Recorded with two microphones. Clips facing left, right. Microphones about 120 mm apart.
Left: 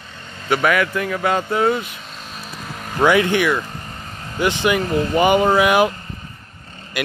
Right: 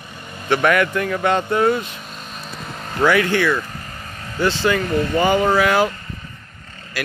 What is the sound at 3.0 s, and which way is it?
Speech, 20° left (ahead or behind).